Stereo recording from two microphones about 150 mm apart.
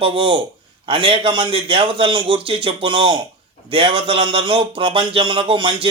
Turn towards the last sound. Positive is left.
turn(degrees=-35)  # may be behind; listen again after turning